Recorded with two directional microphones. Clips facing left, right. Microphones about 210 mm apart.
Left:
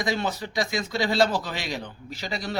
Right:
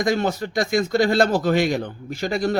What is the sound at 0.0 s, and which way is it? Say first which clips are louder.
Speech: right 6 dB; 45° right (ahead or behind).